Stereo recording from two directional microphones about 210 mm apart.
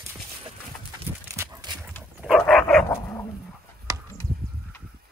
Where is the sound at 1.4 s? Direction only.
20° right (ahead or behind).